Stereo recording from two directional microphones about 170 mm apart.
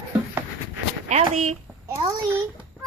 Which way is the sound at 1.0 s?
40° right (ahead or behind).